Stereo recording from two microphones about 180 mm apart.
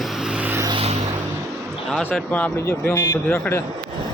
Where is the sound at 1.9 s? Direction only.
5° left (ahead or behind).